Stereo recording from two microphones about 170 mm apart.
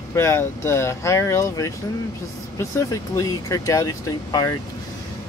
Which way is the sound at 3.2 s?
20° left (ahead or behind).